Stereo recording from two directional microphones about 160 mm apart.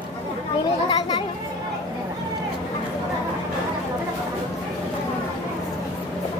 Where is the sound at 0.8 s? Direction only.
30° left (ahead or behind).